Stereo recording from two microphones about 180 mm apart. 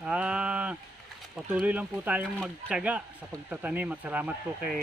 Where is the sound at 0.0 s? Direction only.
5° right (ahead or behind).